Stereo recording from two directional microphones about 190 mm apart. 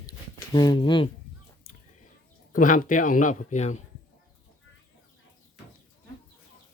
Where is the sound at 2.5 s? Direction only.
45° left (ahead or behind).